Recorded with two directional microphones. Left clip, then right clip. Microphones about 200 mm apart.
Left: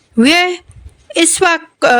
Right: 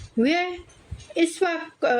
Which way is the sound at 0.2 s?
45° left (ahead or behind).